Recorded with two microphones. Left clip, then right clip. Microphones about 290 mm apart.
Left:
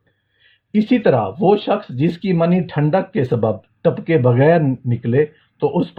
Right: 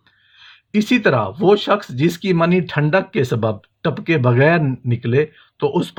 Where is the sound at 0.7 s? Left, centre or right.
Right.